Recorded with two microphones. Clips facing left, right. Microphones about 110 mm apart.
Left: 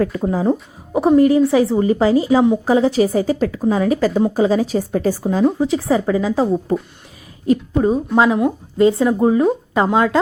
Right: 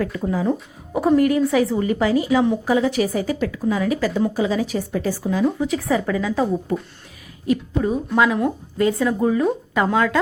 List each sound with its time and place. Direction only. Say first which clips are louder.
0.0 s a woman's voice: left 4 dB; 35° left (ahead or behind)
7.8 s a woman's voice: left 4 dB; 30° left (ahead or behind)